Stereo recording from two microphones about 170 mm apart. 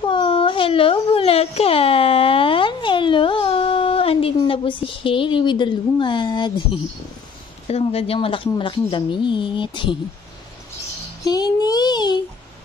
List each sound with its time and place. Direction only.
0.0 s a sound: 30° left (ahead or behind)
7.6 s speech: 35° left (ahead or behind)
11.2 s speech: 25° left (ahead or behind)